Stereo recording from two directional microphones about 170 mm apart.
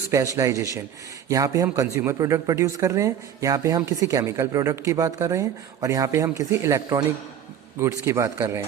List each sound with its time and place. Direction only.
0.3 s a man's voice: 20° right (ahead or behind)